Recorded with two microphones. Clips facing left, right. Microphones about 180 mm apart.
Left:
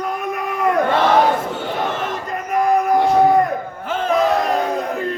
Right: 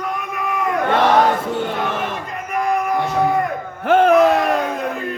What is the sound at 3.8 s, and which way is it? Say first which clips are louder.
Crowd: right 11 dB; 65° right (ahead or behind).